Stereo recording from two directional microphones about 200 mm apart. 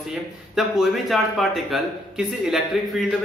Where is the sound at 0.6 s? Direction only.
Centre (ahead or behind).